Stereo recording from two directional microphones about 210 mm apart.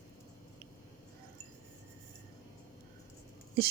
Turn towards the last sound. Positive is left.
turn(degrees=-50)  # may be behind; listen again after turning